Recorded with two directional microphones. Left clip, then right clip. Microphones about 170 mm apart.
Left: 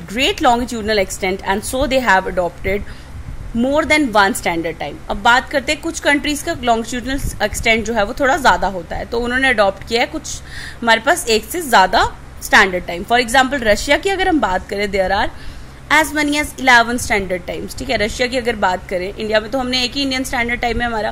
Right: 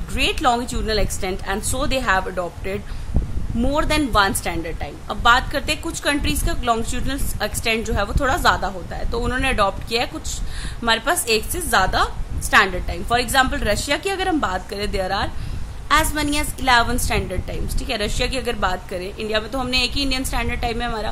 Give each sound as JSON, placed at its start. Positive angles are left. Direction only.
{"t": 0.1, "sound": "a woman's voice", "side_deg": 15}